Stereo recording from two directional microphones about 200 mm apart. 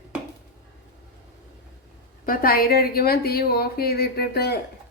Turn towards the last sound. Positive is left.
turn(degrees=50)  # may be behind; listen again after turning